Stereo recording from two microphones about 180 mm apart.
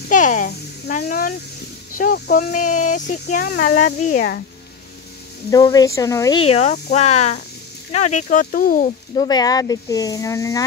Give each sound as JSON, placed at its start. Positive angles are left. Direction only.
{"t": 0.1, "sound": "a child's voice", "side_deg": 45}
{"t": 2.3, "sound": "speech", "side_deg": 45}
{"t": 5.5, "sound": "speech", "side_deg": 20}
{"t": 6.4, "sound": "speech", "side_deg": 35}
{"t": 9.1, "sound": "speech", "side_deg": 25}